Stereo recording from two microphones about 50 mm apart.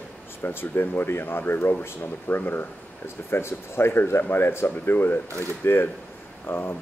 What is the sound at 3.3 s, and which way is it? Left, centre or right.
Speech, left.